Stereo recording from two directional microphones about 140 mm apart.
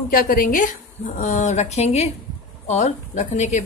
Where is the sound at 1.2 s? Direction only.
60° left (ahead or behind).